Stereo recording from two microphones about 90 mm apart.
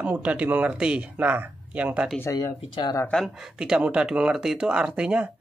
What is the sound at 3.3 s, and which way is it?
Speech, 5° right (ahead or behind).